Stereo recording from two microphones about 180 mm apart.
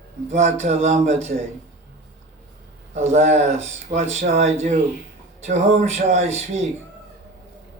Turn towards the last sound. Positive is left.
turn(degrees=-35)  # may be behind; listen again after turning